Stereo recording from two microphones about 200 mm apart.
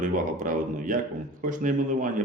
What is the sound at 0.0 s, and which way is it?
A man's voice, 40° right (ahead or behind).